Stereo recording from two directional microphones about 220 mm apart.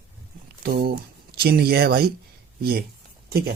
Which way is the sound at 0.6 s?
45° right (ahead or behind).